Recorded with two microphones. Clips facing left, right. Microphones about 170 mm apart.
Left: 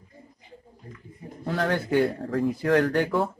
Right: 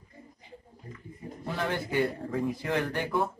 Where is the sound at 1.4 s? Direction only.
80° left.